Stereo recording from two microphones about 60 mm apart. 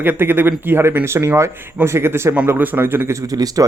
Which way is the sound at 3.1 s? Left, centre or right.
Right.